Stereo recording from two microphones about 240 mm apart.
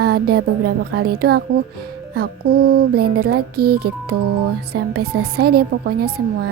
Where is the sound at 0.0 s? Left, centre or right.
Right.